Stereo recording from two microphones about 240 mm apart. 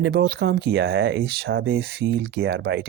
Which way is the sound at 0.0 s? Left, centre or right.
Right.